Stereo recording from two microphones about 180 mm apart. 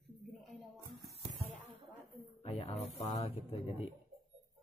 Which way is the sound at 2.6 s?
35° left (ahead or behind).